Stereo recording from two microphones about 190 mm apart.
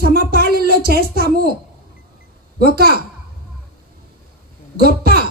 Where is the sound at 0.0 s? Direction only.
50° right (ahead or behind).